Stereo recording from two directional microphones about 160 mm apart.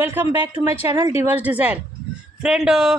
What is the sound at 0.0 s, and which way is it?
A woman's voice, 15° right (ahead or behind).